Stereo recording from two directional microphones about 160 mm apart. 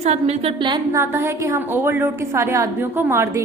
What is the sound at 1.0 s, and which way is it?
A woman's voice, 15° right (ahead or behind).